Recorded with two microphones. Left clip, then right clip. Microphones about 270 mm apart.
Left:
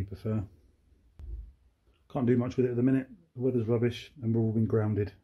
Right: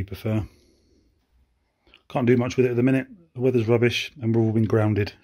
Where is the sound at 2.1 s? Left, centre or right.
Right.